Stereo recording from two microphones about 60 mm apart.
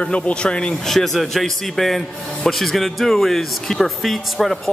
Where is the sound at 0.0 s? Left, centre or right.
Centre.